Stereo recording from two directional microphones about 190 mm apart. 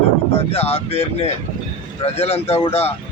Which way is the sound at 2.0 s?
30° left (ahead or behind).